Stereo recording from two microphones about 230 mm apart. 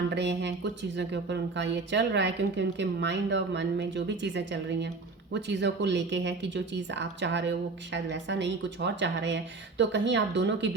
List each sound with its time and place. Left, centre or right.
0.1 s a woman's voice: right